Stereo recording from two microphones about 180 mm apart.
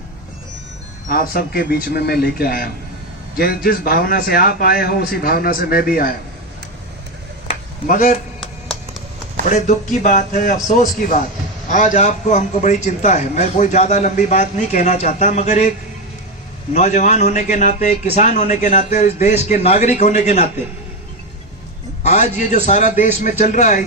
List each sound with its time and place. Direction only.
1.0 s a man's voice: 50° left (ahead or behind)
7.9 s a man's voice: 45° left (ahead or behind)
9.5 s a man's voice: 45° left (ahead or behind)
16.7 s a man's voice: 40° left (ahead or behind)
22.0 s a man's voice: 40° left (ahead or behind)